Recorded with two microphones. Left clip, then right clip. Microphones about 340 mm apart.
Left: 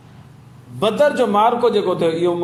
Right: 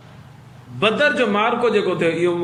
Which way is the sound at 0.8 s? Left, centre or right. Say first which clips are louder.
Left 1 dB; centre.